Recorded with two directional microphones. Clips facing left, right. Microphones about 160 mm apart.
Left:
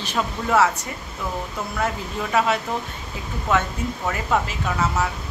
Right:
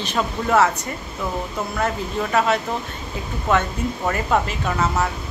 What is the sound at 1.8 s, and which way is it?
Speech, 5° left (ahead or behind).